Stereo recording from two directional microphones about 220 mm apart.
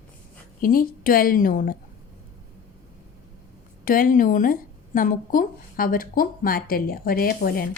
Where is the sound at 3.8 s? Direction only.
40° left (ahead or behind).